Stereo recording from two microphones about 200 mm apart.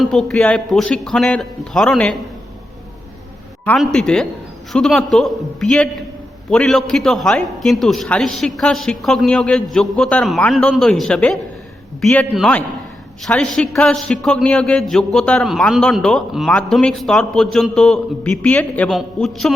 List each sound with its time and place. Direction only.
0.0 s a man's voice: centre (ahead or behind)
3.7 s a man's voice: 5° left (ahead or behind)